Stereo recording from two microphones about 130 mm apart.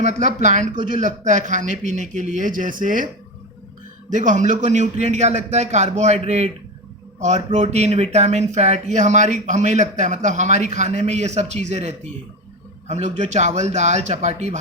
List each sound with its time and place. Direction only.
0.0 s a man's voice: 70° right (ahead or behind); by 3.1 s 90° right
4.1 s speech: 70° right (ahead or behind)